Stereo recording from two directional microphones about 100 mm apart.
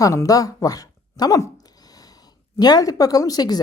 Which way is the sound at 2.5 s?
40° left (ahead or behind).